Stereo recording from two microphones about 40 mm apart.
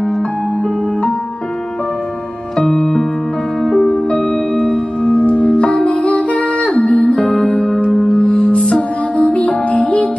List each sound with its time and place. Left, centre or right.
2.5 s music: centre
4.3 s music: left
5.1 s music: left
7.2 s music: left
9.1 s music: left